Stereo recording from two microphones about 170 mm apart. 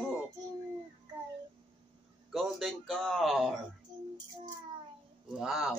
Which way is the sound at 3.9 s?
25° right (ahead or behind).